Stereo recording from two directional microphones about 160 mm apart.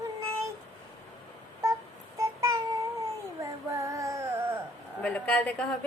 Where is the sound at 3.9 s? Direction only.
20° right (ahead or behind).